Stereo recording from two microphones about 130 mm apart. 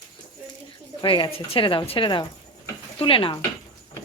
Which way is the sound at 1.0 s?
40° left (ahead or behind).